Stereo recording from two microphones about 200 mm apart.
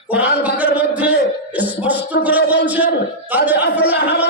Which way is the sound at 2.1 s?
60° left (ahead or behind).